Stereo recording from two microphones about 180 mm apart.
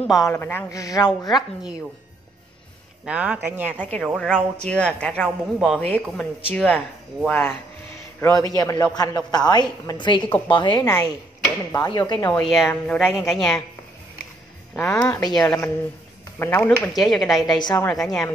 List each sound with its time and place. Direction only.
0.2 s a woman's voice: 10° left (ahead or behind)
3.1 s speech: 5° right (ahead or behind)
3.8 s a woman's voice: 10° left (ahead or behind)
8.2 s a woman's voice: 20° left (ahead or behind)
12.3 s speech: centre (ahead or behind)
14.8 s speech: centre (ahead or behind)
15.0 s a woman's voice: 15° left (ahead or behind)
16.3 s a woman's voice: 10° left (ahead or behind)
17.4 s a woman's voice: 20° left (ahead or behind)
17.8 s speech: centre (ahead or behind)